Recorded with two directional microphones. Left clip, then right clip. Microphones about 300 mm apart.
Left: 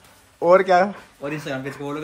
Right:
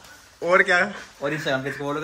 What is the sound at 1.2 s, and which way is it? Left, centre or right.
Speech, centre.